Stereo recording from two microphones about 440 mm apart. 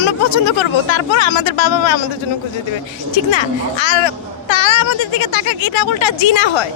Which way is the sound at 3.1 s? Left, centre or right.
Left.